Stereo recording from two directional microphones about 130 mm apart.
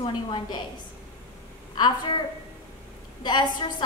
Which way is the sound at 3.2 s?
35° left (ahead or behind).